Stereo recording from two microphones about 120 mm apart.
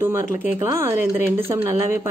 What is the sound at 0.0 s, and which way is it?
A woman's voice, 20° right (ahead or behind).